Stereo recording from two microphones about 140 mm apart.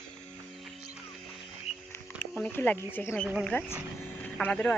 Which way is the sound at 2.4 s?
10° left (ahead or behind).